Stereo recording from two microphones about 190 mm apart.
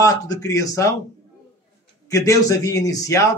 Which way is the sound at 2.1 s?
15° left (ahead or behind).